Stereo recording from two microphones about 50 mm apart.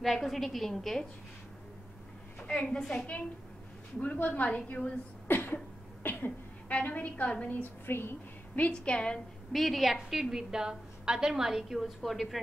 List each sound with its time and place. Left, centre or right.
0.0 s a woman's voice: centre
2.4 s a woman's voice: left
4.0 s a woman's voice: left
5.3 s speech: left
6.0 s a sound: left
6.7 s a woman's voice: left
7.8 s speech: left
8.5 s a woman's voice: left
9.5 s a woman's voice: centre